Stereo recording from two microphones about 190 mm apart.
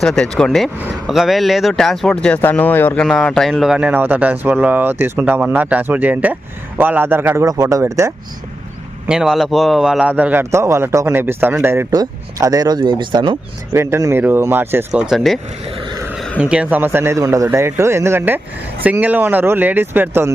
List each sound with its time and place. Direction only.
0.0 s a man's voice: centre (ahead or behind); by 8.1 s 15° right (ahead or behind)
9.0 s a man's voice: 5° right (ahead or behind); by 13.3 s 25° right (ahead or behind)
13.7 s a man's voice: 15° right (ahead or behind)